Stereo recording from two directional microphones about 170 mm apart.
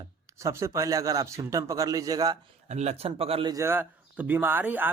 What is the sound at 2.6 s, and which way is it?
Speech, 40° right (ahead or behind).